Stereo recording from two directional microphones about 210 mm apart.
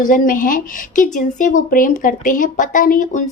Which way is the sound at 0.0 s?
40° left (ahead or behind).